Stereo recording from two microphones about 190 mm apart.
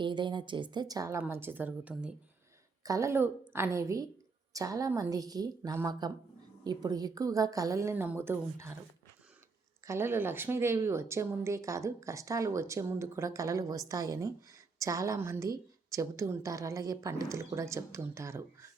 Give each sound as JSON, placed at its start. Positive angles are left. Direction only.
{"t": 0.0, "sound": "speech", "side_deg": -25}
{"t": 9.8, "sound": "speech", "side_deg": -15}